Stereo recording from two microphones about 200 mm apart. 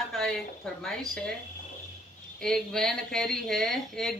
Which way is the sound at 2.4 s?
5° left (ahead or behind).